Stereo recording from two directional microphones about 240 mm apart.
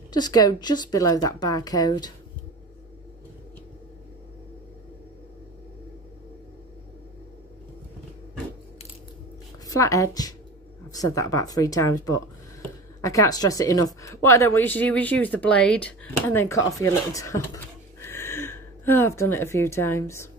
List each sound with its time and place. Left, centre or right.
0.1 s speech: centre
9.7 s speech: centre